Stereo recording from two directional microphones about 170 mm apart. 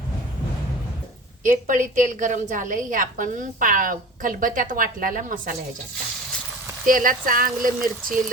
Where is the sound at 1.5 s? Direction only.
50° right (ahead or behind).